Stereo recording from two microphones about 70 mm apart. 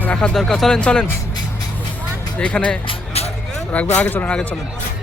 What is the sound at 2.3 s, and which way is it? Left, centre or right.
Speech, centre.